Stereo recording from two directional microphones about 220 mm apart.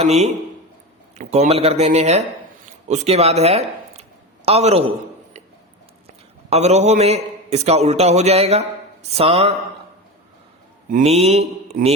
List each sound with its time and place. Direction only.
0.0 s a man's voice: 30° right (ahead or behind)
6.5 s a man's voice: 30° right (ahead or behind)
10.9 s a man's voice: 30° right (ahead or behind)